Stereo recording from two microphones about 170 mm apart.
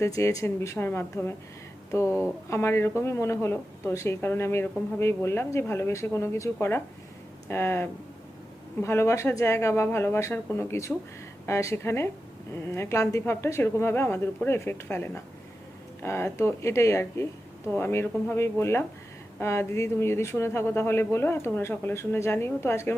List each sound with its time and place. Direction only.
0.0 s a woman's voice: 15° left (ahead or behind)